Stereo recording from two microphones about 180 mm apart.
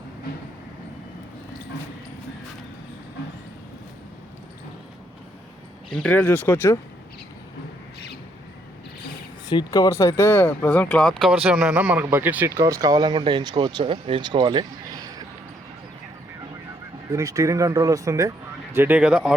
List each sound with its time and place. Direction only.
5.9 s speech: 5° left (ahead or behind)
9.5 s speech: 25° left (ahead or behind)
11.4 s speech: 5° right (ahead or behind)
17.1 s speech: 20° right (ahead or behind)